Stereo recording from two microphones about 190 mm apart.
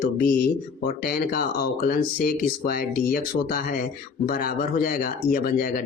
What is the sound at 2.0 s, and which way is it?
Speech, 50° left (ahead or behind).